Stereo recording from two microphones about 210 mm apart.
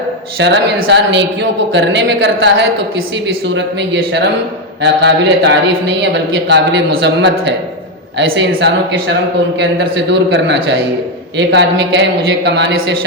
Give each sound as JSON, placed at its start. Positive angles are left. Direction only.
{"t": 0.3, "sound": "a man's voice", "side_deg": -60}